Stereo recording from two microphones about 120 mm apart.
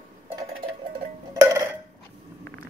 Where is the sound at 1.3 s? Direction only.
30° right (ahead or behind).